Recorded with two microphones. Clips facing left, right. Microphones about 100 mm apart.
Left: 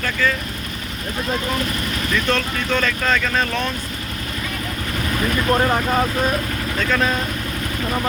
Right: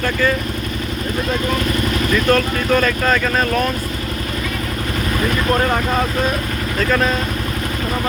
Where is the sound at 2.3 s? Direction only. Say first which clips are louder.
Right 6 dB; 10° right (ahead or behind).